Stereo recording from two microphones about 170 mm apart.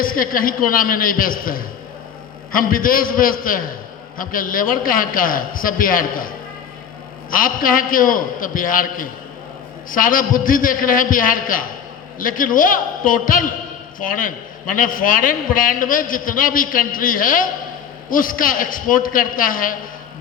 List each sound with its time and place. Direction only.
0.0 s a man's voice: 55° left (ahead or behind)